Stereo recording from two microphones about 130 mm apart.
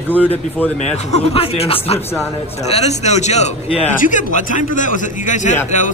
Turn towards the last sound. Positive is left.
turn(degrees=70)  # may be behind; listen again after turning